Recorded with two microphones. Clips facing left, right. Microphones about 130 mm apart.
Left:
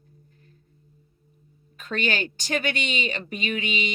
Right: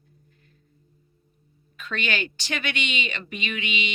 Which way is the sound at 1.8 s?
40° left (ahead or behind).